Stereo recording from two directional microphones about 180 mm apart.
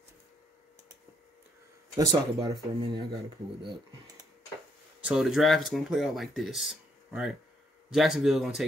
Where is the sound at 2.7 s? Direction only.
30° right (ahead or behind).